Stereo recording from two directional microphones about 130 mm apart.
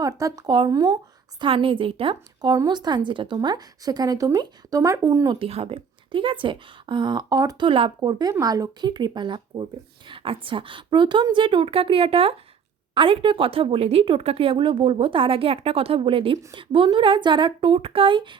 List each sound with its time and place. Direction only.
0.0 s speech: 25° right (ahead or behind)
1.4 s a woman's voice: 40° right (ahead or behind)
5.4 s a woman's voice: 50° right (ahead or behind); by 7.7 s 30° right (ahead or behind)
7.7 s a woman's voice: 40° right (ahead or behind)